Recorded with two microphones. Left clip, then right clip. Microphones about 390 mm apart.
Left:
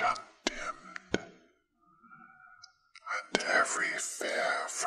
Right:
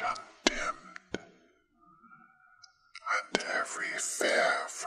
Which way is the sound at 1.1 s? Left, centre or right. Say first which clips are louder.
Left 7 dB; left.